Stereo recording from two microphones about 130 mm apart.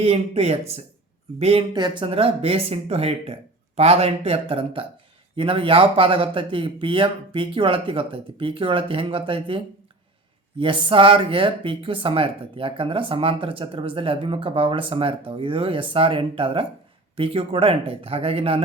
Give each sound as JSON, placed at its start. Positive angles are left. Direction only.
{"t": 0.0, "sound": "speech", "side_deg": -55}
{"t": 1.7, "sound": "speech", "side_deg": -35}
{"t": 10.6, "sound": "speech", "side_deg": -40}